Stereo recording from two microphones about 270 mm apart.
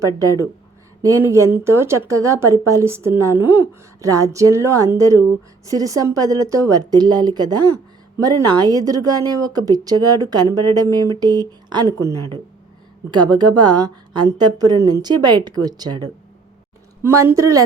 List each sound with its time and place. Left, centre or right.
1.0 s speech: centre
13.1 s speech: centre